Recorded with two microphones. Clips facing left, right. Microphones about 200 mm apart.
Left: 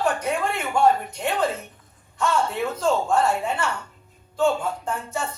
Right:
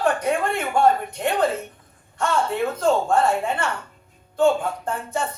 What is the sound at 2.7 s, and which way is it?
Speech, 55° right (ahead or behind).